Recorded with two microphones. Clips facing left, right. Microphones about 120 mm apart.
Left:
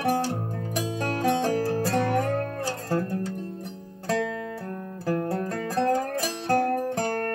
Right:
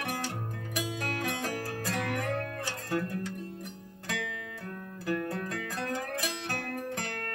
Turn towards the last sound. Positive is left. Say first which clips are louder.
# left 10 dB
turn(degrees=35)  # may be behind; listen again after turning